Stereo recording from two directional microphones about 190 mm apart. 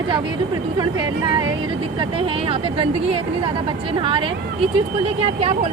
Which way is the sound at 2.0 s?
30° right (ahead or behind).